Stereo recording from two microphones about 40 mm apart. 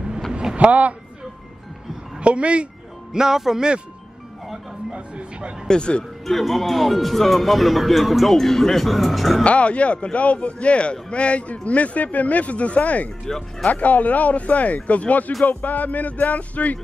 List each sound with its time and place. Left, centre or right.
0.6 s speech: right
2.1 s a woman's voice: right
3.1 s speech: centre
4.9 s a sound: right
5.7 s speech: left
6.2 s speech: centre
9.4 s a man's voice: left
13.2 s speech: centre
13.7 s a man's voice: left